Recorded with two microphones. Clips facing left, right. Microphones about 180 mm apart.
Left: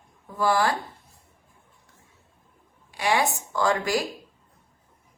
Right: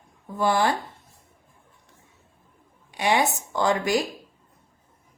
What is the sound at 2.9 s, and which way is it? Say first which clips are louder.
A woman's voice: right 1 dB; 20° right (ahead or behind).